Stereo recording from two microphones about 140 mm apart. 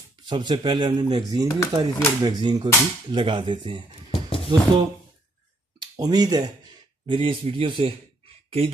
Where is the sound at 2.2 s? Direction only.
30° right (ahead or behind).